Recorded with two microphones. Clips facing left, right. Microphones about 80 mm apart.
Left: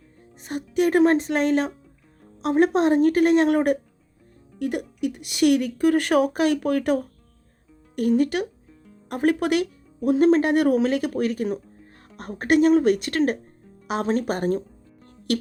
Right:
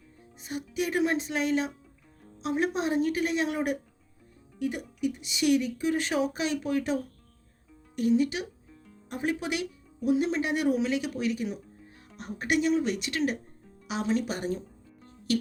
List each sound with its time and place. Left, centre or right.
0.3 s speech: left
15.3 s music: left